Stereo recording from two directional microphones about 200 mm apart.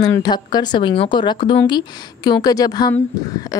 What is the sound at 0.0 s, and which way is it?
Speech, 20° left (ahead or behind).